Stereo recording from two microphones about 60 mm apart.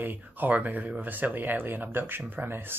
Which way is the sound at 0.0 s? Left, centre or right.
Right.